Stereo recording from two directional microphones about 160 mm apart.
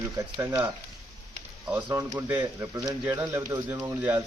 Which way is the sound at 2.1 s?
10° right (ahead or behind).